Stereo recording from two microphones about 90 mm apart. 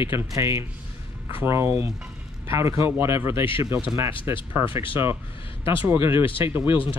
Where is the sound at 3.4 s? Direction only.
75° left (ahead or behind).